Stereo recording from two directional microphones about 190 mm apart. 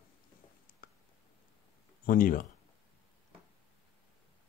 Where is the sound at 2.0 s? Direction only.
45° left (ahead or behind).